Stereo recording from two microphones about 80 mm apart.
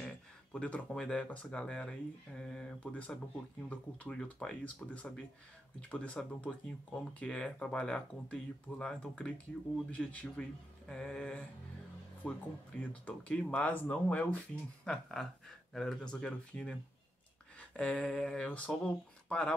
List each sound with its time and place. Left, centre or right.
0.0 s speech: centre
14.9 s speech: centre